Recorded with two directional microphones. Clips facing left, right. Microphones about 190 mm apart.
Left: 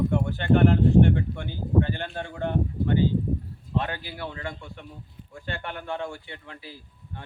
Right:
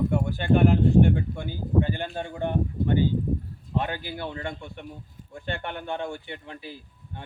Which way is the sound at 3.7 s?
15° right (ahead or behind).